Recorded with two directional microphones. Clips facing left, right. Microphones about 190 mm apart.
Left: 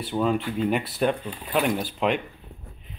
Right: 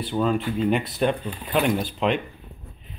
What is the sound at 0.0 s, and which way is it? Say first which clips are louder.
Speech: right 1 dB; 10° left (ahead or behind).